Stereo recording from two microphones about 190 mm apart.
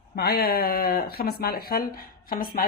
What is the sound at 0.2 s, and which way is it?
Speech, 55° left (ahead or behind).